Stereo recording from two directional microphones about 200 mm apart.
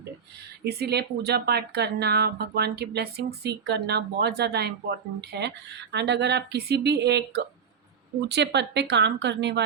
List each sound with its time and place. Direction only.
0.6 s speech: 55° right (ahead or behind)